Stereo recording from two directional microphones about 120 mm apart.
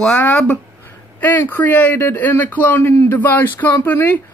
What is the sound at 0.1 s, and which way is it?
Speech, 15° left (ahead or behind).